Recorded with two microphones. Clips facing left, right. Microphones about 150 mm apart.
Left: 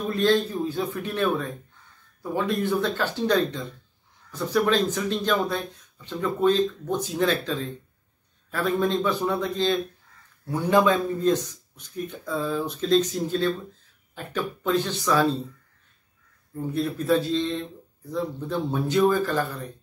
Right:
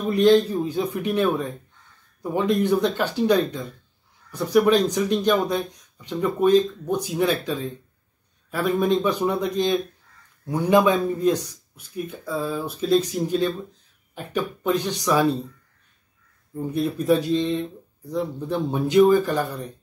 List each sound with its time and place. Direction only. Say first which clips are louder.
0.0 s speech: right 5 dB; 15° right (ahead or behind)
16.7 s speech: right 2 dB; 15° right (ahead or behind)